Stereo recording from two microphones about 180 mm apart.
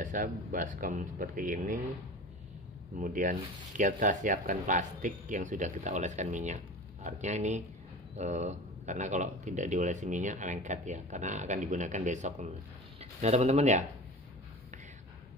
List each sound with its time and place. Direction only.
0.0 s speech: 45° right (ahead or behind)
3.0 s speech: 45° right (ahead or behind)